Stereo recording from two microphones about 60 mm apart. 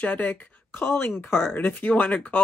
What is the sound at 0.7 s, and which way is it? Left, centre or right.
Speech, left.